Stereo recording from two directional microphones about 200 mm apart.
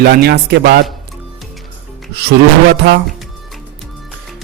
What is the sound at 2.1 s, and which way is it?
Speech, 55° right (ahead or behind).